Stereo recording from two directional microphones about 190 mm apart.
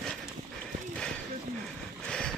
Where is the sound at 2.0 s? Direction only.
5° left (ahead or behind).